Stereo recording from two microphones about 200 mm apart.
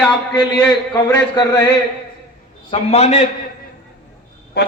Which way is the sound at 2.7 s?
30° left (ahead or behind).